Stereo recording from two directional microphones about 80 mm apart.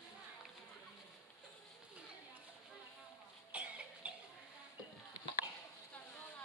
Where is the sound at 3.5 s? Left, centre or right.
Centre.